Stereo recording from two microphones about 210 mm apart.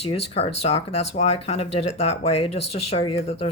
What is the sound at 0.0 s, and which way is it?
Speech, 30° left (ahead or behind).